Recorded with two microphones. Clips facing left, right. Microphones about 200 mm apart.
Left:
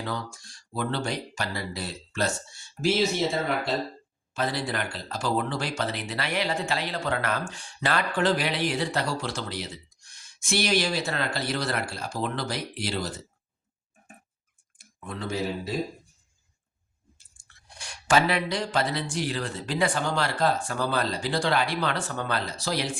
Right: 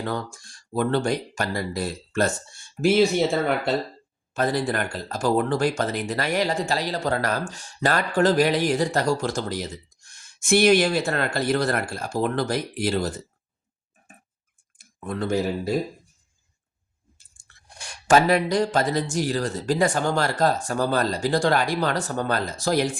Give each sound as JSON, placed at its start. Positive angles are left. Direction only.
{"t": 0.0, "sound": "speech", "side_deg": -50}
{"t": 4.4, "sound": "speech", "side_deg": -50}
{"t": 14.8, "sound": "speech", "side_deg": -50}
{"t": 17.7, "sound": "speech", "side_deg": -45}